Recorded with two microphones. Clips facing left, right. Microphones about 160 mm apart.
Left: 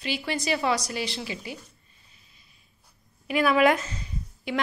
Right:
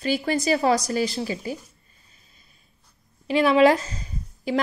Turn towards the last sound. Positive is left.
turn(degrees=-40)  # may be behind; listen again after turning